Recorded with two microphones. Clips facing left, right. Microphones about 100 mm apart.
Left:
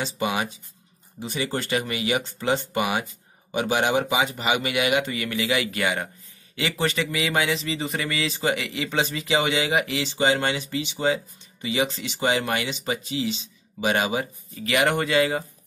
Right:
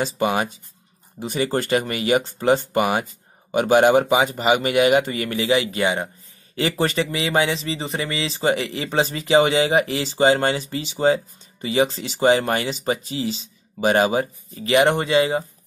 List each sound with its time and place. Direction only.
0.0 s speech: 45° right (ahead or behind); by 6.0 s 25° right (ahead or behind)
6.5 s speech: 35° right (ahead or behind)